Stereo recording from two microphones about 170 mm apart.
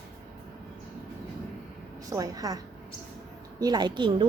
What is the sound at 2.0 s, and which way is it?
A woman's voice, 20° right (ahead or behind).